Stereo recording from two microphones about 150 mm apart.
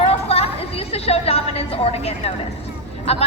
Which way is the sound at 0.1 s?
40° left (ahead or behind).